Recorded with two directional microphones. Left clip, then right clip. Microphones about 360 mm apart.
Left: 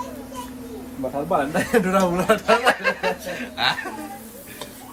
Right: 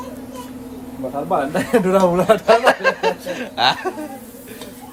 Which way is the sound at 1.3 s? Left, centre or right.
Centre.